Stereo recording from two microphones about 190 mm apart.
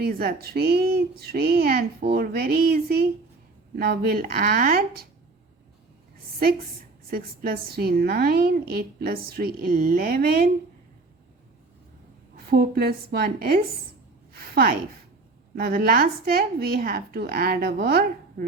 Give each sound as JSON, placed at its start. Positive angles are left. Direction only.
{"t": 0.0, "sound": "a woman's voice", "side_deg": -50}
{"t": 7.1, "sound": "a woman's voice", "side_deg": -50}
{"t": 12.5, "sound": "a woman's voice", "side_deg": -55}
{"t": 14.3, "sound": "a sound", "side_deg": -50}
{"t": 15.5, "sound": "a woman's voice", "side_deg": -50}